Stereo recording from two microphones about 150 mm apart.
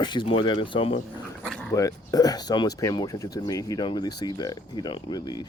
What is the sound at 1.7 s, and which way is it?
Speech, 20° left (ahead or behind).